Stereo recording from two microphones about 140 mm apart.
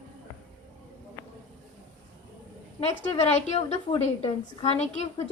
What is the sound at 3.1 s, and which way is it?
A woman's voice, 50° left (ahead or behind).